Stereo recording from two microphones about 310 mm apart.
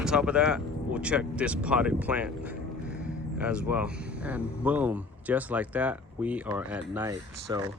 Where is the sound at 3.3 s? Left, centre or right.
Centre.